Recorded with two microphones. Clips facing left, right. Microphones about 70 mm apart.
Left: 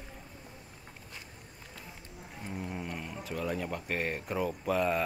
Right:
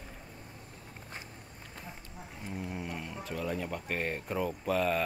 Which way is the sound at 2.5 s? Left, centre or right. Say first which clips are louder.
Even; centre.